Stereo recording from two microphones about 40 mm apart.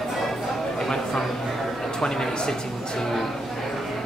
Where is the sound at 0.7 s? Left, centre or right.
Centre.